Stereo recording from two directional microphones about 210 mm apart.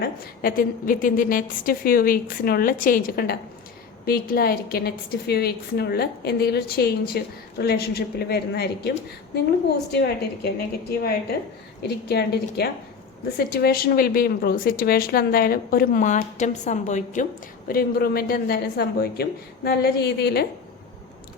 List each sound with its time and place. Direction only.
0.4 s a woman's voice: 40° left (ahead or behind)
10.4 s a woman's voice: 50° left (ahead or behind)